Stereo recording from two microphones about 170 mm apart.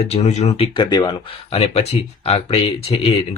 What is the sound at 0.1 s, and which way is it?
Speech, 40° left (ahead or behind).